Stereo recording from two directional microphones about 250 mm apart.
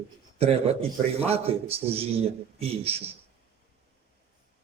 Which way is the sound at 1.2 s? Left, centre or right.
Right.